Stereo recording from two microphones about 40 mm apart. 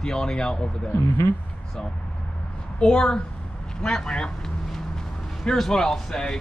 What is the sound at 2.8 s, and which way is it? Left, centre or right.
Speech, left.